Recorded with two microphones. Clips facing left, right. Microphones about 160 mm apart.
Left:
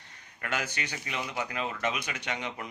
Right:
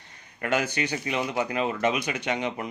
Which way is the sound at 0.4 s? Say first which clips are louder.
Right 8 dB; 20° right (ahead or behind).